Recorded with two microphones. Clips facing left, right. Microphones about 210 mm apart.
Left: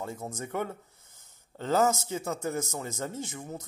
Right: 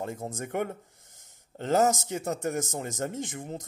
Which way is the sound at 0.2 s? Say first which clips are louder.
Right 2 dB; 25° right (ahead or behind).